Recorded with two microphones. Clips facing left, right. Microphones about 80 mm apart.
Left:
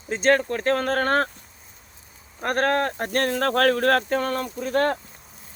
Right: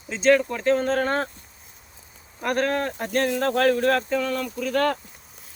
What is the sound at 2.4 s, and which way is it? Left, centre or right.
Speech, left.